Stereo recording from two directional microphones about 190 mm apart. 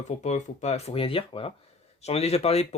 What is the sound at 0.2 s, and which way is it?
Speech, 40° left (ahead or behind).